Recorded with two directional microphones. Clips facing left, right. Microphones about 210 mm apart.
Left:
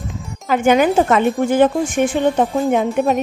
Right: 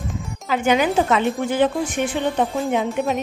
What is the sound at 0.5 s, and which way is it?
Speech, 50° left (ahead or behind).